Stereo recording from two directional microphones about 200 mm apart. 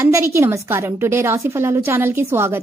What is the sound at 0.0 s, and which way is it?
A woman's voice, 10° right (ahead or behind).